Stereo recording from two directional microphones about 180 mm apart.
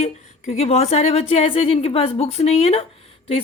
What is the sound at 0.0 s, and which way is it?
A woman's voice, 35° left (ahead or behind).